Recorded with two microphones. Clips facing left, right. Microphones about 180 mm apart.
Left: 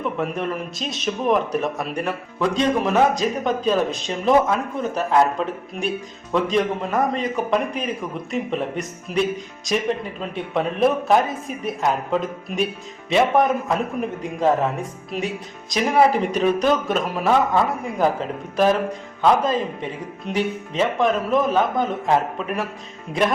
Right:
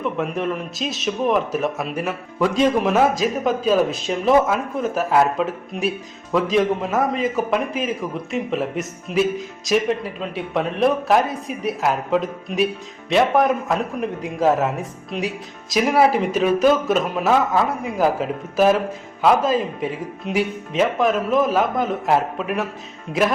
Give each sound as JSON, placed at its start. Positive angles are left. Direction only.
{"t": 0.0, "sound": "speech", "side_deg": 0}